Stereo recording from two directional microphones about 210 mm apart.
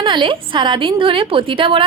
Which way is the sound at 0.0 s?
20° right (ahead or behind).